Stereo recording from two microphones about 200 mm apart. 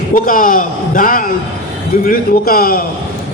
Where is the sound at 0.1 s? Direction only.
40° left (ahead or behind).